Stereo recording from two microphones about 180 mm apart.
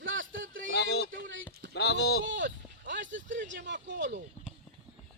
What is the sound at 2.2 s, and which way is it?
Speech, 90° right.